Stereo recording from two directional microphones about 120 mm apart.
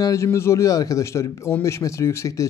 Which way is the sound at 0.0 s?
25° left (ahead or behind).